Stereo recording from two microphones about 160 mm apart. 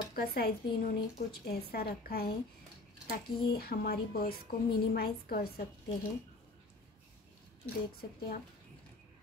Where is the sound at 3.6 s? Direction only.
70° left (ahead or behind).